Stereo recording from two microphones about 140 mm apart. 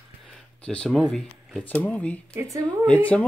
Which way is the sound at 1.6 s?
10° left (ahead or behind).